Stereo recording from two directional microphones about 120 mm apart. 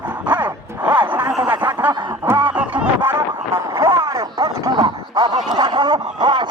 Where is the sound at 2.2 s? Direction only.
15° right (ahead or behind).